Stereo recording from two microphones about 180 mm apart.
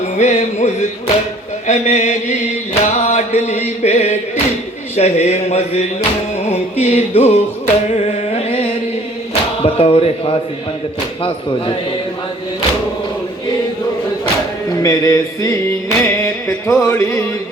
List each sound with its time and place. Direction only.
0.2 s music: 40° left (ahead or behind)
2.7 s chant: 40° left (ahead or behind)
4.9 s music: 35° left (ahead or behind)
14.7 s music: 20° left (ahead or behind)